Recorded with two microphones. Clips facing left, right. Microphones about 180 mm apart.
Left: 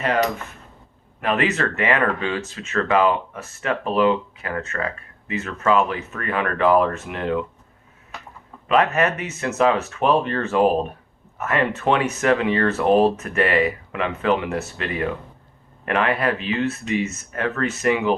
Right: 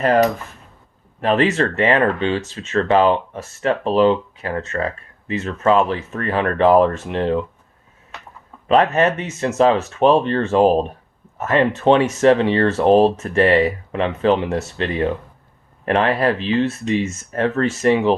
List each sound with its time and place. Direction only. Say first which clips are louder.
0.0 s speech: right 6 dB; 40° right (ahead or behind)
8.7 s speech: right 4 dB; 30° right (ahead or behind)